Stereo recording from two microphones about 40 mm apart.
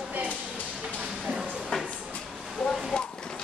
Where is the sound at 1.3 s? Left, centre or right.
Right.